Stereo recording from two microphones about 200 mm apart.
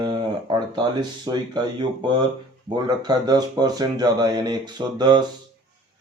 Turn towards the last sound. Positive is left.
turn(degrees=-20)  # may be behind; listen again after turning